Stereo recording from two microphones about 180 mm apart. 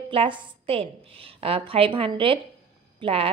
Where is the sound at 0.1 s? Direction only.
30° right (ahead or behind).